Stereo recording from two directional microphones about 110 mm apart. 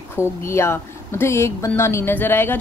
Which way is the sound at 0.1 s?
25° left (ahead or behind).